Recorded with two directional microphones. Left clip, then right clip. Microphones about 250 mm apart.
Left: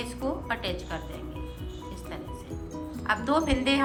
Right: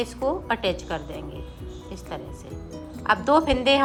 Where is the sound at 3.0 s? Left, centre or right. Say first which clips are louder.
Right 6 dB; centre.